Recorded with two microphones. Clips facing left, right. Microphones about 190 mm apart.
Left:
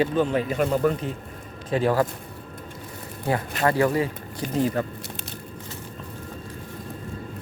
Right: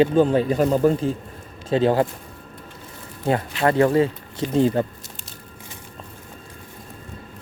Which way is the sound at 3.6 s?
25° right (ahead or behind).